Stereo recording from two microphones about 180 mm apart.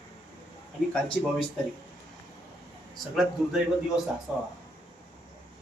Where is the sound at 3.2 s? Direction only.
5° right (ahead or behind).